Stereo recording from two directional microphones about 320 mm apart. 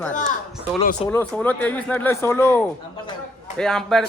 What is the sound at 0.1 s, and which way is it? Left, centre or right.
Speech, left.